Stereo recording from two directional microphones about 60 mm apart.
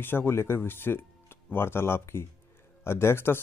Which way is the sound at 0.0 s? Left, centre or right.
Left.